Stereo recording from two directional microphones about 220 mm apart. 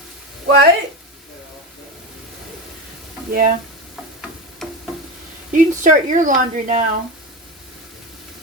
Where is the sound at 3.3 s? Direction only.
35° right (ahead or behind).